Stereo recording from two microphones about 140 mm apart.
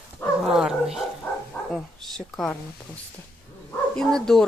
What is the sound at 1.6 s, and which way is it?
Bow-wow, 10° left (ahead or behind).